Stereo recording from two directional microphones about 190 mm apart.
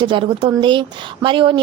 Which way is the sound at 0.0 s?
25° right (ahead or behind).